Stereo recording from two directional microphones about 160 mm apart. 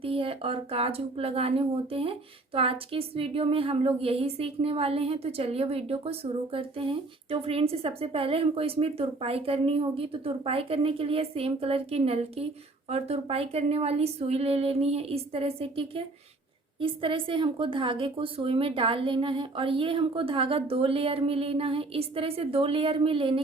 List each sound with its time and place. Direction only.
0.0 s speech: 35° right (ahead or behind)